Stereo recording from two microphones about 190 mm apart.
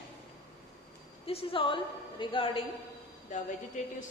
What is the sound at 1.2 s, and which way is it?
A man's voice, 30° left (ahead or behind).